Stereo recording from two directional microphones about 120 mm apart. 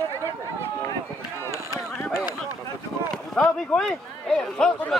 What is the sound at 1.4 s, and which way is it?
Run, 25° left (ahead or behind).